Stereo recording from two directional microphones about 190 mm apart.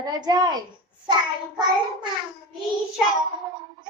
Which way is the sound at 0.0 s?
20° right (ahead or behind).